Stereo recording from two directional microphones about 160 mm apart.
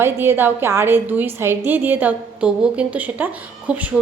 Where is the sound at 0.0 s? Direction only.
15° right (ahead or behind).